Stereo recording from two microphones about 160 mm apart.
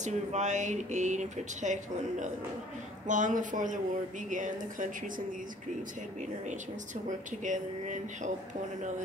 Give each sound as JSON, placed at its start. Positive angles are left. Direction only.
{"t": 0.0, "sound": "speech", "side_deg": -45}
{"t": 7.1, "sound": "speech", "side_deg": -50}